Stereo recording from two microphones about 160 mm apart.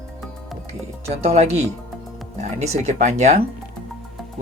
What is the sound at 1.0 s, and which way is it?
Speech, 40° right (ahead or behind).